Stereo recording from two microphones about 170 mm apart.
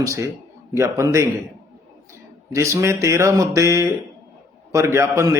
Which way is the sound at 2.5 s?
15° right (ahead or behind).